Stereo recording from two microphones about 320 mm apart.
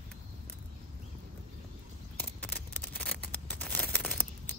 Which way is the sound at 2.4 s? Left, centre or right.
Centre.